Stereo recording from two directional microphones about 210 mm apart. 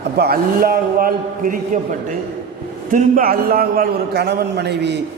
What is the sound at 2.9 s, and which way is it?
A man's voice, 40° right (ahead or behind).